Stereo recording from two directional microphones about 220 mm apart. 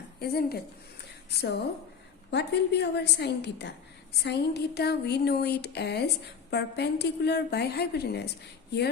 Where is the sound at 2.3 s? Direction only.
50° left (ahead or behind).